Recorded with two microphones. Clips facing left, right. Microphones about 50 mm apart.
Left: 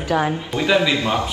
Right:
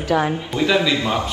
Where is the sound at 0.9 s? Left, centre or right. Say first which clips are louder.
Even; left.